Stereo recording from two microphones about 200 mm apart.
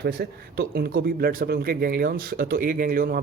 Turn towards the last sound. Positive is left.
turn(degrees=-45)  # may be behind; listen again after turning